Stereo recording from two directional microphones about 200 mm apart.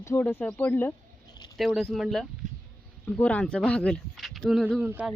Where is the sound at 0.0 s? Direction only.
10° left (ahead or behind).